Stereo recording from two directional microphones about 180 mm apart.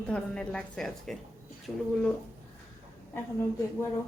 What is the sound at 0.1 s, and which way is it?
A woman's voice, 5° left (ahead or behind).